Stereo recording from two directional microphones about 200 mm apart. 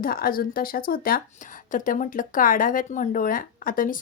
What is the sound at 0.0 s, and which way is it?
Speech, 45° left (ahead or behind).